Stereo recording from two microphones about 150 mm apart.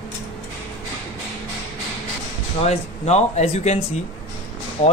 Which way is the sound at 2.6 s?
45° left (ahead or behind).